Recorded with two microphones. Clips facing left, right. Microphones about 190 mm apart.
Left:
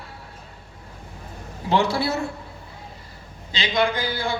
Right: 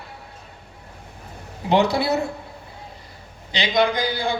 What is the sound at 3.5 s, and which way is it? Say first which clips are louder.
Speech: right 2 dB; 15° right (ahead or behind).